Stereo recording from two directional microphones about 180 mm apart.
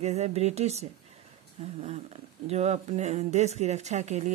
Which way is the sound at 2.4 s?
35° right (ahead or behind).